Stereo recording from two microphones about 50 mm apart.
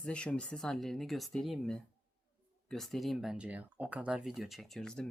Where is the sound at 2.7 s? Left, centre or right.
Centre.